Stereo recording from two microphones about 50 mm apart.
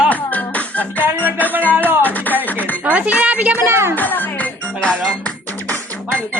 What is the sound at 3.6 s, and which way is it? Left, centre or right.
Speech, right.